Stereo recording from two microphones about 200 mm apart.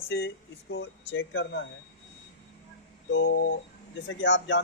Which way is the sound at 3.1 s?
65° left (ahead or behind).